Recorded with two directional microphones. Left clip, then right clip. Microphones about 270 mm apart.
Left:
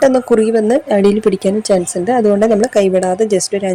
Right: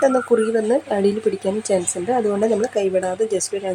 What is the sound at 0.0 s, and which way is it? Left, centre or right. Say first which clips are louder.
Speech: left 6 dB; left.